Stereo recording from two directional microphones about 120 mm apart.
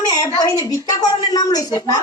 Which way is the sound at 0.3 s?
35° left (ahead or behind).